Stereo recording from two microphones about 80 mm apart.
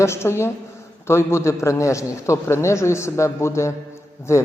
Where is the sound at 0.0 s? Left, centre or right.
Left.